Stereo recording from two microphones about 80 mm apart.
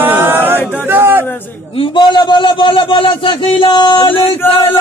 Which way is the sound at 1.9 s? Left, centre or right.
Left.